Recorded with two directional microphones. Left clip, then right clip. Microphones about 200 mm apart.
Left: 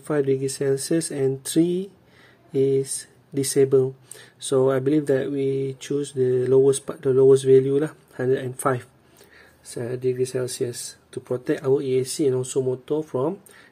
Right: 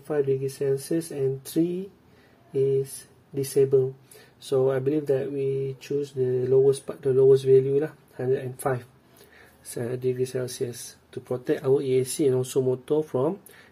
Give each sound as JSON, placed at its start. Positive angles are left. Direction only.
{"t": 0.0, "sound": "speech", "side_deg": 25}
{"t": 9.7, "sound": "speech", "side_deg": 0}
{"t": 9.9, "sound": "speech", "side_deg": 15}
{"t": 11.4, "sound": "speech", "side_deg": 5}